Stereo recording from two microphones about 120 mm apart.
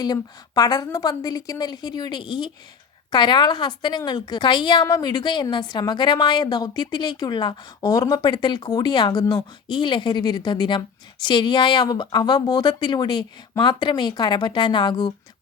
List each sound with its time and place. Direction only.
0.0 s a woman's voice: 35° left (ahead or behind)